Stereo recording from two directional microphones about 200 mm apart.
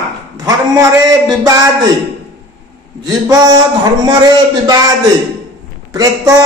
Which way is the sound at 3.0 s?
20° right (ahead or behind).